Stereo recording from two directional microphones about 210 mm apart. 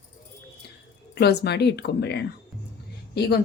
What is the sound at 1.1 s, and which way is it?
A woman's voice, 50° left (ahead or behind).